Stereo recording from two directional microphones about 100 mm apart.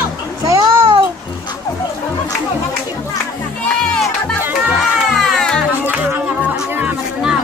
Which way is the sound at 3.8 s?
5° left (ahead or behind).